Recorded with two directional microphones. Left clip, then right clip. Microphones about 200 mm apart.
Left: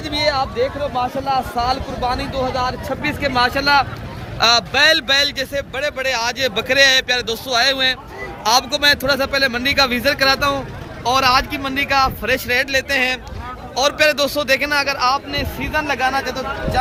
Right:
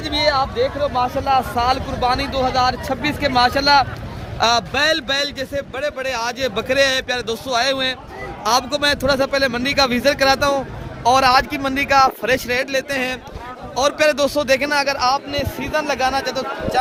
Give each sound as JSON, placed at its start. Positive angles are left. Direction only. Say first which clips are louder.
{"t": 0.0, "sound": "speech", "louder": "right 1 dB", "side_deg": 5}
{"t": 0.9, "sound": "speech", "louder": "right 2 dB", "side_deg": -30}
{"t": 4.4, "sound": "a man's voice", "louder": "left 3 dB", "side_deg": -50}